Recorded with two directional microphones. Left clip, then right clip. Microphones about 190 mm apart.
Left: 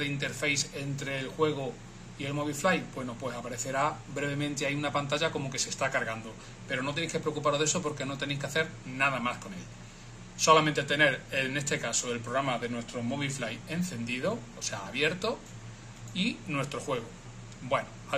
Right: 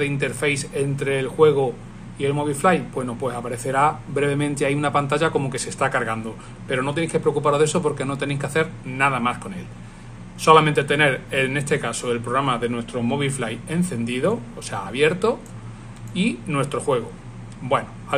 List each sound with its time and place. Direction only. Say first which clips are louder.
0.0 s a man's voice: right 9 dB; 40° right (ahead or behind)
10.4 s a man's voice: right 9 dB; 40° right (ahead or behind)